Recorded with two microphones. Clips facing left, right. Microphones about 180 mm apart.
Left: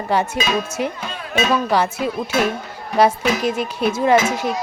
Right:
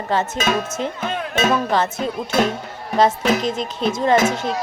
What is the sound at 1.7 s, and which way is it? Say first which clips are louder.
Speech: left 1 dB; 10° left (ahead or behind).